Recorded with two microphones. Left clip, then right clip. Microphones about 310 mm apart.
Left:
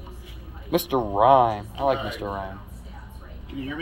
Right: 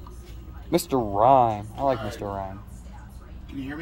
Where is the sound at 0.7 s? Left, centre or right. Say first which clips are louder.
Even; right.